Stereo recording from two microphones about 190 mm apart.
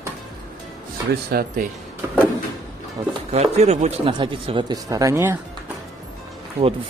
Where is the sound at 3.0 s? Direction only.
30° right (ahead or behind).